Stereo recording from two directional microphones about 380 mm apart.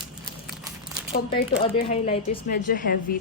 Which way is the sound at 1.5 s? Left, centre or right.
Centre.